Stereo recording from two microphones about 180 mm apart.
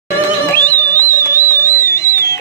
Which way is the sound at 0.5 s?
10° left (ahead or behind).